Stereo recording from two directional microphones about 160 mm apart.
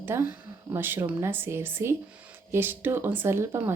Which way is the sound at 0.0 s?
15° right (ahead or behind).